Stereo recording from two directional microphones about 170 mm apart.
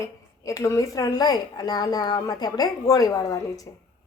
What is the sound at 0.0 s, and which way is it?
Speech, 20° left (ahead or behind).